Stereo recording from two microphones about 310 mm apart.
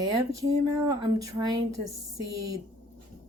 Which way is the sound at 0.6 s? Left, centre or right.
Centre.